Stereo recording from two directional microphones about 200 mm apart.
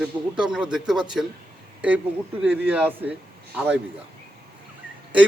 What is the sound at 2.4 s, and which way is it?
Speech, 10° right (ahead or behind).